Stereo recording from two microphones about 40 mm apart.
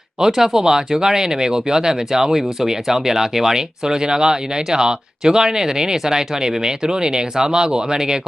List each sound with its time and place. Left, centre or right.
0.3 s speech: centre